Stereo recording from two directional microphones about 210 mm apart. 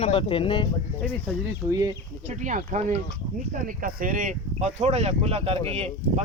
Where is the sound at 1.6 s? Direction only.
15° right (ahead or behind).